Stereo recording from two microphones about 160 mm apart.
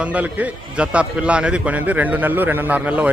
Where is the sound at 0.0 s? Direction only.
10° right (ahead or behind).